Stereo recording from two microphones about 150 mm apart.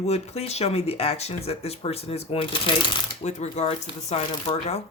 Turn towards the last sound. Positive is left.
turn(degrees=45)  # may be behind; listen again after turning